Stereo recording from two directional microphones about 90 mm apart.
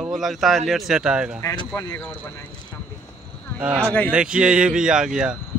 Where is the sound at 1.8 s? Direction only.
30° left (ahead or behind).